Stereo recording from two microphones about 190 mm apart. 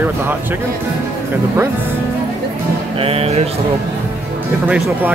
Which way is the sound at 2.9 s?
30° right (ahead or behind).